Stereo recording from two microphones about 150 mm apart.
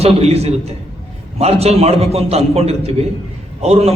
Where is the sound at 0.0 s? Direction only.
45° right (ahead or behind).